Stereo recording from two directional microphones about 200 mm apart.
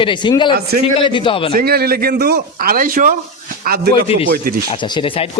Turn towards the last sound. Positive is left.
turn(degrees=25)  # may be behind; listen again after turning